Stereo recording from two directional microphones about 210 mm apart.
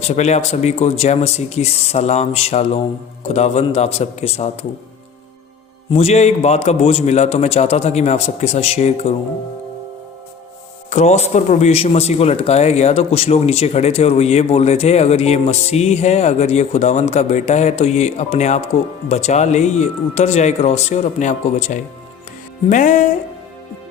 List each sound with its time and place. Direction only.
0.1 s a man's voice: 30° left (ahead or behind)
5.9 s a man's voice: 30° left (ahead or behind)
10.9 s a man's voice: 30° left (ahead or behind)